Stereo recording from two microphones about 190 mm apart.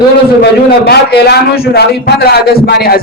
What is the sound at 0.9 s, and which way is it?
A man's voice, 55° left (ahead or behind).